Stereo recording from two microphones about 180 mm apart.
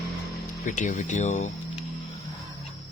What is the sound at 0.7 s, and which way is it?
Speech, 45° left (ahead or behind).